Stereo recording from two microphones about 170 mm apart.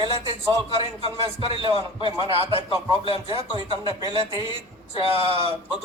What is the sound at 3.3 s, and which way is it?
Speech, 30° right (ahead or behind).